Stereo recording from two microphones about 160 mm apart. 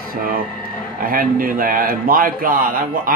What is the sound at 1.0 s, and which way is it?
A man's voice, 60° right (ahead or behind).